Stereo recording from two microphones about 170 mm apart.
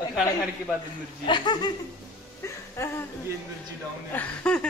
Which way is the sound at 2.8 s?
15° left (ahead or behind).